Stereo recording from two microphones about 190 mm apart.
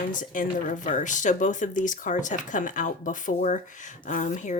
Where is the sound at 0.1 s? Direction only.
45° left (ahead or behind).